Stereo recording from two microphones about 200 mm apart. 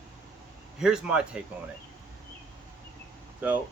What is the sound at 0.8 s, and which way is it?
Speech, 5° right (ahead or behind).